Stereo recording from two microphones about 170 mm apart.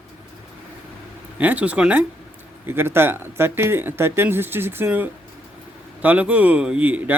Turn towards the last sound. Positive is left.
turn(degrees=-10)  # may be behind; listen again after turning